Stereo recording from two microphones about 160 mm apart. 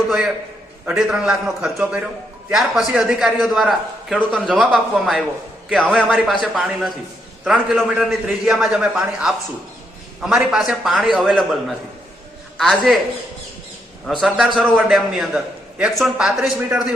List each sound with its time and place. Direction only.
0.9 s a man's voice: 5° right (ahead or behind)
12.5 s a man's voice: centre (ahead or behind)
14.1 s a man's voice: centre (ahead or behind)